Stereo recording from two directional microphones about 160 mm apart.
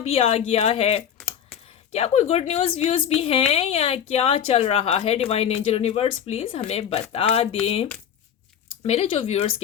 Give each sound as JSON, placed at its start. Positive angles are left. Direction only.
{"t": 0.0, "sound": "speech", "side_deg": 40}
{"t": 8.9, "sound": "speech", "side_deg": 40}